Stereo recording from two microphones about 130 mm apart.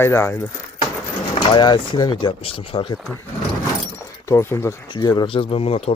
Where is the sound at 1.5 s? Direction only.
35° left (ahead or behind).